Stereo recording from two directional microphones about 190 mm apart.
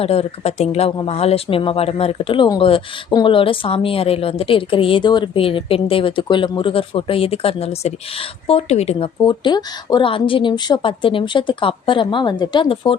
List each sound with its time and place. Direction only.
0.0 s speech: 30° left (ahead or behind)